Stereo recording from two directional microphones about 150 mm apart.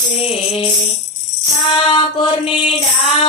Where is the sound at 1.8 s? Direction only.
35° left (ahead or behind).